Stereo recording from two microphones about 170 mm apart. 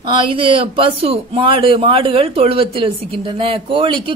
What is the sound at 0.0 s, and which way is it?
Speech, 30° right (ahead or behind).